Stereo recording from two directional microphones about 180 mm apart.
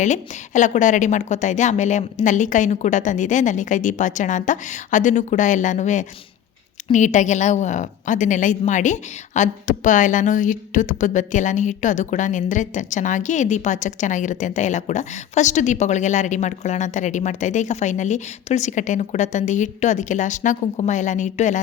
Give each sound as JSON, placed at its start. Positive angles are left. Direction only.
{"t": 0.0, "sound": "a woman's voice", "side_deg": 45}